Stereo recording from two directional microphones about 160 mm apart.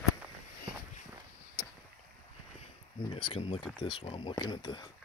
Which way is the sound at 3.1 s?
30° left (ahead or behind).